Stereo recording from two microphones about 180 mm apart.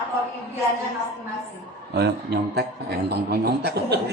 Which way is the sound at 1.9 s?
65° right (ahead or behind).